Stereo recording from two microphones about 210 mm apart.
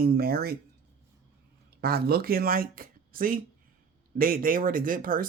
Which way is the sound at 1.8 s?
45° right (ahead or behind).